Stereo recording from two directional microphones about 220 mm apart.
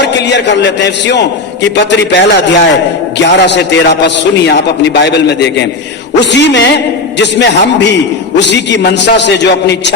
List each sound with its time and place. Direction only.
0.1 s a man's voice: 50° left (ahead or behind)